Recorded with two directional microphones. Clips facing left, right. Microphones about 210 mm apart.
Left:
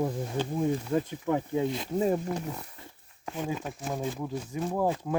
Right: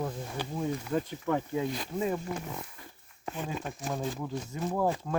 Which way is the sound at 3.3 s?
10° left (ahead or behind).